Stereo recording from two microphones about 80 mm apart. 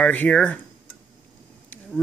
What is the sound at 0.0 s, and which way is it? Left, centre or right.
Speech, centre.